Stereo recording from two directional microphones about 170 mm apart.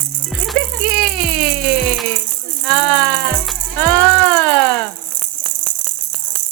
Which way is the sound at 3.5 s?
10° left (ahead or behind).